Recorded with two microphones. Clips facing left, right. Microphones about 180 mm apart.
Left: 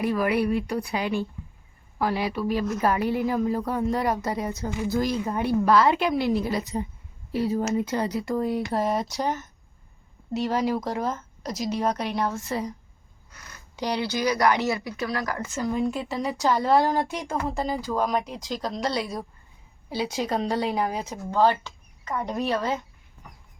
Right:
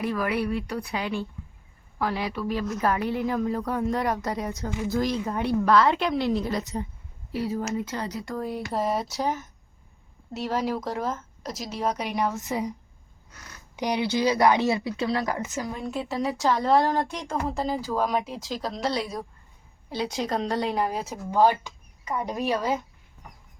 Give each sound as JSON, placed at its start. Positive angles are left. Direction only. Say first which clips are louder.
{"t": 0.0, "sound": "a woman's voice", "louder": "left 3 dB", "side_deg": 15}
{"t": 7.3, "sound": "a woman's voice", "louder": "left 4 dB", "side_deg": 25}
{"t": 13.7, "sound": "speech", "louder": "right 2 dB", "side_deg": -15}
{"t": 15.6, "sound": "speech", "louder": "left 5 dB", "side_deg": 0}